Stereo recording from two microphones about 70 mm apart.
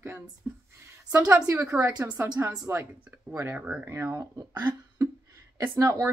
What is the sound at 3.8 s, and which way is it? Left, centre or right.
Speech, right.